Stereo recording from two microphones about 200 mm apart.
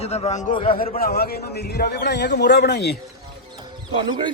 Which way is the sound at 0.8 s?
50° left (ahead or behind).